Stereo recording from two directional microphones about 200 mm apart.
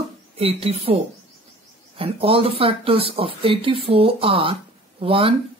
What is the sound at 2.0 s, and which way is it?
Speech, 30° right (ahead or behind).